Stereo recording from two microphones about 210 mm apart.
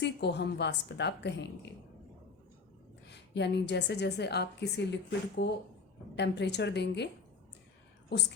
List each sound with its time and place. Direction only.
0.0 s a woman's voice: 55° left (ahead or behind)
3.1 s a woman's voice: 55° left (ahead or behind)
8.1 s a woman's voice: 50° left (ahead or behind)